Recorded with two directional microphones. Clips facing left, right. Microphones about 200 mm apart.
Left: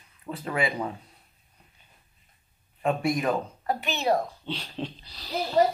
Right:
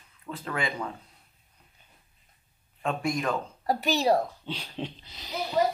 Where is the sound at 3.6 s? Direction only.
40° right (ahead or behind).